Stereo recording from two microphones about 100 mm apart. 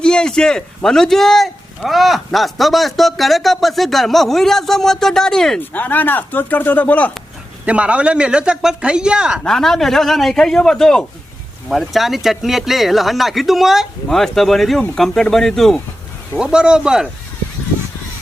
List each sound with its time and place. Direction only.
0.0 s speech: 10° left (ahead or behind)
5.5 s speech: 15° left (ahead or behind)
7.6 s speech: 10° right (ahead or behind)
9.4 s speech: 5° left (ahead or behind)
16.4 s speech: 10° right (ahead or behind)